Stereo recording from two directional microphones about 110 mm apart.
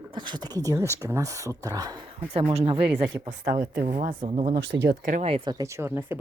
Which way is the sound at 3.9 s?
75° right (ahead or behind).